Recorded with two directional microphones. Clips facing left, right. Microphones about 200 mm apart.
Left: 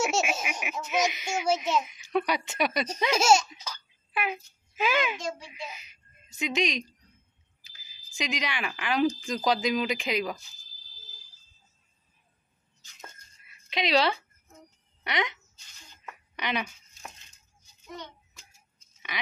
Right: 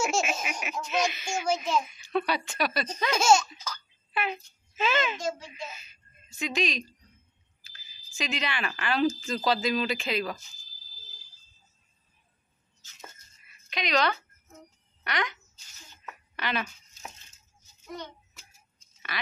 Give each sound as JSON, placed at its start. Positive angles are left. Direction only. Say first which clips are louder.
{"t": 0.0, "sound": "speech", "louder": "left 1 dB", "side_deg": 10}
{"t": 3.1, "sound": "speech", "louder": "even", "side_deg": 10}
{"t": 13.7, "sound": "speech", "louder": "left 2 dB", "side_deg": 25}
{"t": 16.3, "sound": "speech", "louder": "even", "side_deg": 15}